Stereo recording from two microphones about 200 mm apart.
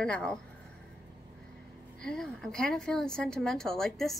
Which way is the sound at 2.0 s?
5° left (ahead or behind).